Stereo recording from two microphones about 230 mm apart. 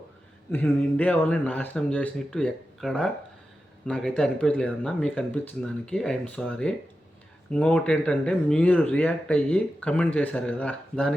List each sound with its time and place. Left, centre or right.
0.5 s speech: centre